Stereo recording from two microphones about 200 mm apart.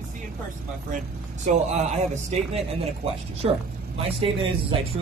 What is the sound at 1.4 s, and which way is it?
Speech, 35° right (ahead or behind).